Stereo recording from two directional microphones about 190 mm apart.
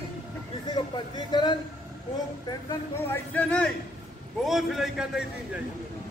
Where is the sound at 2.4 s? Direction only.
10° left (ahead or behind).